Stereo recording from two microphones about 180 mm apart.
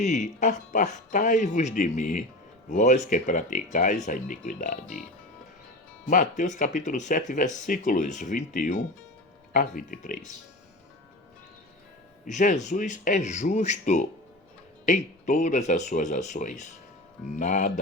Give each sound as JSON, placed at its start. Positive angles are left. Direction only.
{"t": 0.0, "sound": "speech", "side_deg": 40}
{"t": 6.1, "sound": "speech", "side_deg": 45}
{"t": 12.2, "sound": "speech", "side_deg": 45}